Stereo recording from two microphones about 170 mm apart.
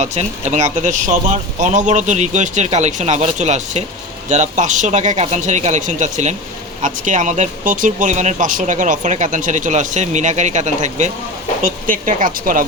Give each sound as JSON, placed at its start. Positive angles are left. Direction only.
{"t": 0.0, "sound": "speech", "side_deg": -45}